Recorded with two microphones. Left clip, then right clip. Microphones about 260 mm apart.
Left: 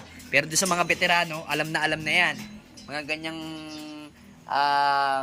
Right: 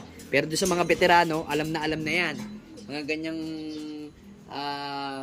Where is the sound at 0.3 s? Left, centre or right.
Centre.